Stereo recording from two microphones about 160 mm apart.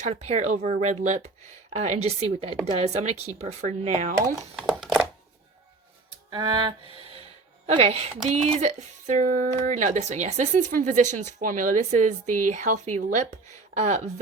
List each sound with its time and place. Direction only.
0.0 s a woman's voice: 45° right (ahead or behind)
4.5 s a sound: 5° right (ahead or behind)
6.3 s music: 25° right (ahead or behind)
7.7 s speech: 40° right (ahead or behind)